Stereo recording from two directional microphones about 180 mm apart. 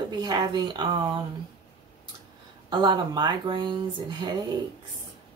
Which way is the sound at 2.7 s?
25° right (ahead or behind).